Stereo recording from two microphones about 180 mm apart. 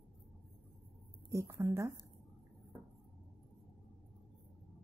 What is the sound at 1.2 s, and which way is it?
Speech, 15° right (ahead or behind).